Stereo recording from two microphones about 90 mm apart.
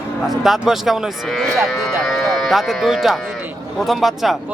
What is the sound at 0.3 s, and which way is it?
Speech, centre (ahead or behind).